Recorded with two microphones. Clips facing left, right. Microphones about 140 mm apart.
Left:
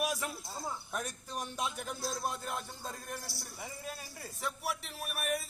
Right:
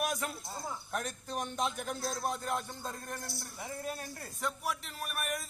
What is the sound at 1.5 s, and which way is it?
A man's voice, 5° left (ahead or behind).